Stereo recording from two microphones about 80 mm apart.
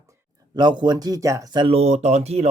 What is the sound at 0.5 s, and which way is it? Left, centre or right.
Speech, right.